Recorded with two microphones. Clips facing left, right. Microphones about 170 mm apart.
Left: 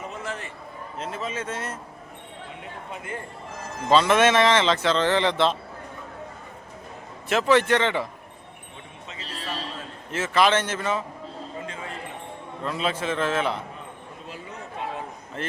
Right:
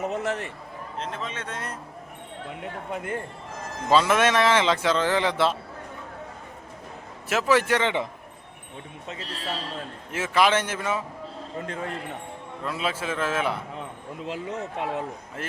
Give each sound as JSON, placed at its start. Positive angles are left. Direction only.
{"t": 0.1, "sound": "a man's voice", "side_deg": -65}
{"t": 0.9, "sound": "speech", "side_deg": 5}
{"t": 2.9, "sound": "speech", "side_deg": -55}
{"t": 3.8, "sound": "speech", "side_deg": -10}
{"t": 7.3, "sound": "speech", "side_deg": -5}
{"t": 10.1, "sound": "speech", "side_deg": -10}
{"t": 11.6, "sound": "speech", "side_deg": -55}
{"t": 12.6, "sound": "speech", "side_deg": -5}
{"t": 14.3, "sound": "speech", "side_deg": -75}
{"t": 15.4, "sound": "speech", "side_deg": -5}